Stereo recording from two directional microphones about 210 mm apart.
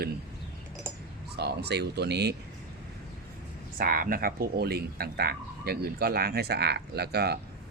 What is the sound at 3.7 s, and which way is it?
Speech, 45° right (ahead or behind).